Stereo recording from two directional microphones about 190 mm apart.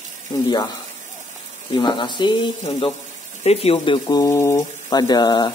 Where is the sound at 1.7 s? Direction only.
25° left (ahead or behind).